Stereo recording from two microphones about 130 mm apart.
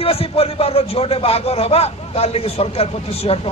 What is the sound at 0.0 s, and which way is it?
Speech, 45° left (ahead or behind).